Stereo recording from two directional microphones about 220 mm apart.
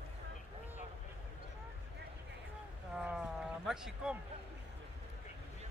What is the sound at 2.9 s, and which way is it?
Speech, 5° right (ahead or behind).